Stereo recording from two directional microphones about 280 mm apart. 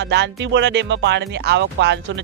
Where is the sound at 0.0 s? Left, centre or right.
Right.